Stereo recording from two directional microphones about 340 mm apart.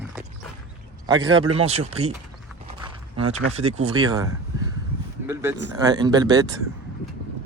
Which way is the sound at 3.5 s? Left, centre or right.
Centre.